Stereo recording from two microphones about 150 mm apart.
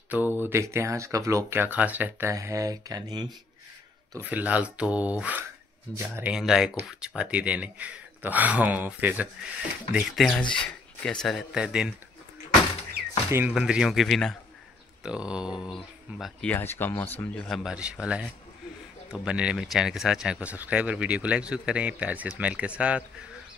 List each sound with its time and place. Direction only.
0.1 s speech: 10° right (ahead or behind); by 3.3 s 30° right (ahead or behind)
4.2 s speech: 10° right (ahead or behind)
13.5 s speech: 5° right (ahead or behind); by 17.5 s 15° left (ahead or behind)
17.5 s speech: 5° right (ahead or behind)